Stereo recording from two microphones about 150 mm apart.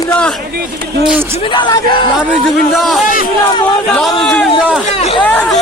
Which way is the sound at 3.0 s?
65° left (ahead or behind).